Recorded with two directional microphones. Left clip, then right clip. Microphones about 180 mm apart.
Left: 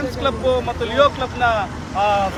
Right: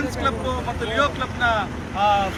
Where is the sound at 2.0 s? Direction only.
20° left (ahead or behind).